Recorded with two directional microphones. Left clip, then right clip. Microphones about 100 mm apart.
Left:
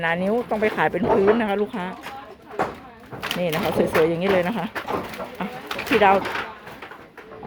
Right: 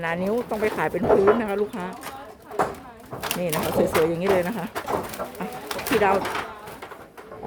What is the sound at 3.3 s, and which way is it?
Speech, 5° left (ahead or behind).